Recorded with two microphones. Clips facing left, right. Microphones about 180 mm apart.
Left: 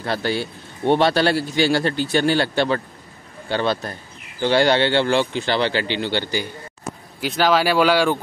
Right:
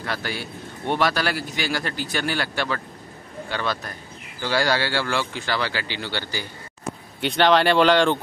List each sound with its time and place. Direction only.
0.0 s a man's voice: 30° left (ahead or behind)
7.2 s speech: 5° left (ahead or behind)